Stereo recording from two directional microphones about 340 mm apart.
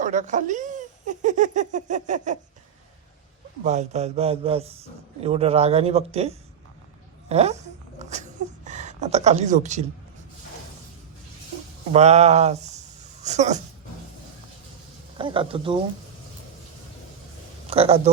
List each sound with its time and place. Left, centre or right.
0.0 s speech: right
3.6 s speech: centre
7.3 s a sound: centre
11.9 s speech: centre
15.2 s speech: centre
17.7 s speech: centre